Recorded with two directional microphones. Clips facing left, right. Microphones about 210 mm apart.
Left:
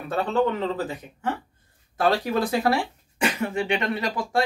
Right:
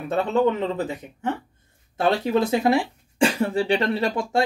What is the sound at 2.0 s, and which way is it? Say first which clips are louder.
Speech: right 2 dB; 25° right (ahead or behind).